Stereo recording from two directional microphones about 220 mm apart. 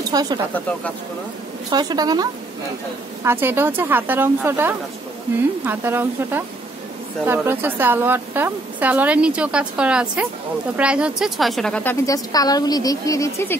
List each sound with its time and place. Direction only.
0.1 s speech: 15° right (ahead or behind)
1.7 s a woman's voice: 20° right (ahead or behind)
3.3 s a woman's voice: 10° right (ahead or behind); by 13.6 s 10° left (ahead or behind)